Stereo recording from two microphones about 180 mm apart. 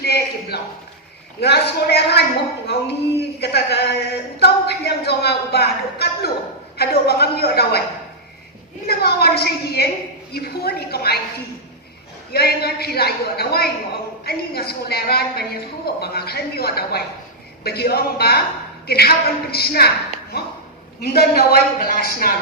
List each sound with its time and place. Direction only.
0.0 s a sound: 65° left (ahead or behind)
1.4 s speech: 65° left (ahead or behind)
8.9 s speech: 60° left (ahead or behind)
12.3 s speech: 60° left (ahead or behind)
21.0 s speech: 60° left (ahead or behind)